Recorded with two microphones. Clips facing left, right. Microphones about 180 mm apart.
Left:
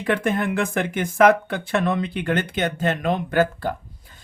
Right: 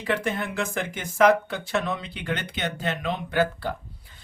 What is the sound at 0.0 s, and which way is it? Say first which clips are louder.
Speech: left 5 dB; 55° left (ahead or behind).